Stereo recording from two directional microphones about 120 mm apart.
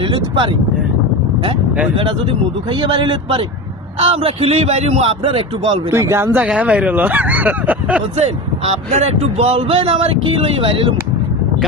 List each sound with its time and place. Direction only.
0.1 s speech: 45° right (ahead or behind)
2.8 s a man's voice: 40° right (ahead or behind)
4.0 s a man's voice: 55° right (ahead or behind)
5.9 s speech: 25° right (ahead or behind)
8.2 s speech: 60° right (ahead or behind)